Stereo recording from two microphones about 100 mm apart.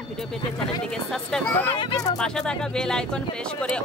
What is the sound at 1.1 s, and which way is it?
Speech, 5° left (ahead or behind).